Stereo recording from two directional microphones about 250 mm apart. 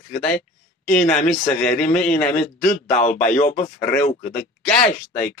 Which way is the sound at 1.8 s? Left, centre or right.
Centre.